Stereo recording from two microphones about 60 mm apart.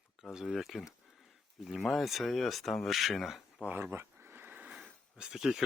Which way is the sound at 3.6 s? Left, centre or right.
Right.